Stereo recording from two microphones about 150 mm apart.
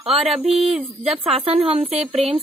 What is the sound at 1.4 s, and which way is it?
Speech, 40° right (ahead or behind).